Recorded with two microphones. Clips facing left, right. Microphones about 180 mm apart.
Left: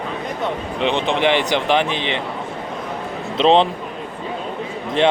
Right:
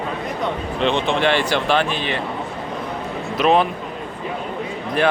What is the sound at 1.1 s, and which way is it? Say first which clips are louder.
Speech: left 1 dB; 15° left (ahead or behind).